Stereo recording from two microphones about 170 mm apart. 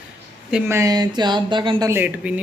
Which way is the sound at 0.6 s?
15° right (ahead or behind).